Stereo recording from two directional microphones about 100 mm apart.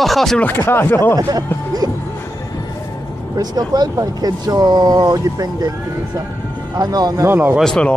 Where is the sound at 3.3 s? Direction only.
40° right (ahead or behind).